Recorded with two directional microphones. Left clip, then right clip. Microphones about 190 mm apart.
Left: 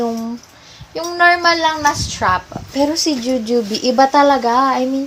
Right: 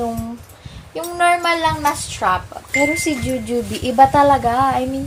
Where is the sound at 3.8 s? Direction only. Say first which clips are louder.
Right 1 dB; 30° left (ahead or behind).